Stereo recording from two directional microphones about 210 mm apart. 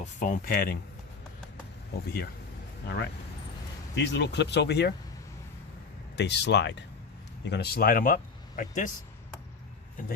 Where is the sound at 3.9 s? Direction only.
55° left (ahead or behind).